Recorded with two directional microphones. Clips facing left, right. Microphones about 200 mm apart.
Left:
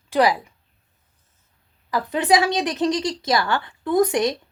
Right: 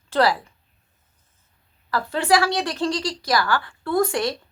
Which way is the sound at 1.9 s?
20° left (ahead or behind).